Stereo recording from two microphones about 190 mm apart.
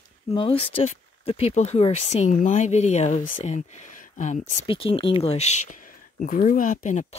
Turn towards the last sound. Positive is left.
turn(degrees=45)  # may be behind; listen again after turning